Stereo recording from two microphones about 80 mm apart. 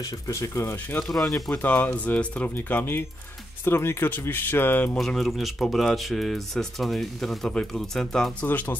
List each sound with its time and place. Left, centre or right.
0.3 s speech: left
1.0 s speech: centre
1.5 s speech: centre
4.9 s speech: centre
8.4 s speech: left